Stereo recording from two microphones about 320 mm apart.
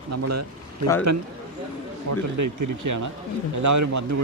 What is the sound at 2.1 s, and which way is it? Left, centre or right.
A man's voice, right.